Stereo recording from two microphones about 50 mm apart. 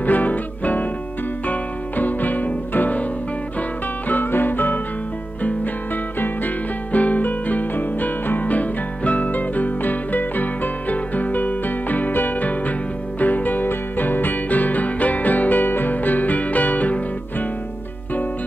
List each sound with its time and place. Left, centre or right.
0.0 s music: left
4.1 s music: left
6.1 s music: left